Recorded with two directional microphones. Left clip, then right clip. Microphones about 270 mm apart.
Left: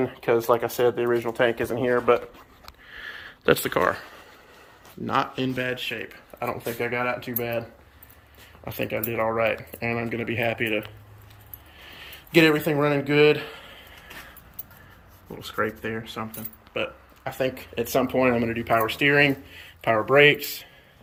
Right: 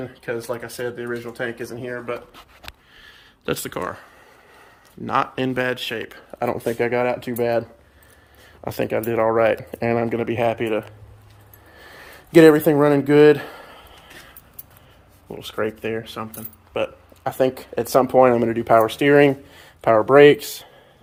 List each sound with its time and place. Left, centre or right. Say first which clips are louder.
0.2 s speech: left 6 dB; centre
2.9 s a sound: left 8 dB; centre
5.0 s speech: right 4 dB; centre; by 7.6 s right
8.6 s speech: right 6 dB; centre
12.3 s speech: right 7 dB; right
13.7 s a sound: right 1 dB; centre
15.4 s speech: right 3 dB; centre